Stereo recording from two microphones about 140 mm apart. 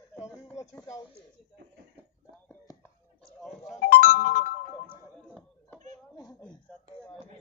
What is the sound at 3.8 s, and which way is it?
Music, 90° left.